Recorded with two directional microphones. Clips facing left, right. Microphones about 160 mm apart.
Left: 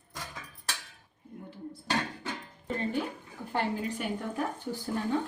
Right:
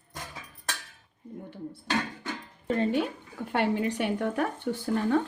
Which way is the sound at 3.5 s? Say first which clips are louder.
Right 5 dB; 70° right (ahead or behind).